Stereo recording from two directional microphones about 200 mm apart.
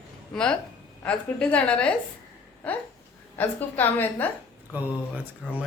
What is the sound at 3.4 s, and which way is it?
Speech, 10° left (ahead or behind).